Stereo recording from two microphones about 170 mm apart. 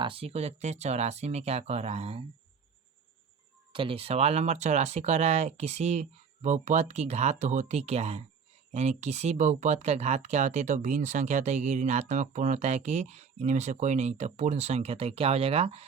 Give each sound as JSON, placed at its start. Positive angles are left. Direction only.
{"t": 0.0, "sound": "speech", "side_deg": -35}
{"t": 3.7, "sound": "speech", "side_deg": -30}